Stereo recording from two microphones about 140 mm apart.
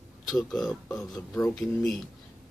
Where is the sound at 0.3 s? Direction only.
Centre (ahead or behind).